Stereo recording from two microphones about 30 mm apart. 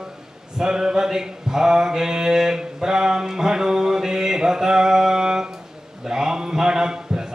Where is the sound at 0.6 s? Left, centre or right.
Right.